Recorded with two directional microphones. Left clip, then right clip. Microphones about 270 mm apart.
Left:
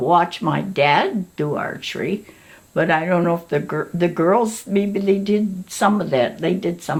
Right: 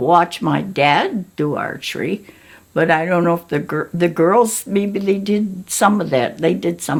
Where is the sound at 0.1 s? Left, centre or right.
Right.